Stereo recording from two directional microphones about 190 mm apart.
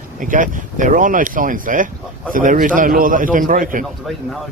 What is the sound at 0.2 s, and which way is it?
Speech, 45° right (ahead or behind).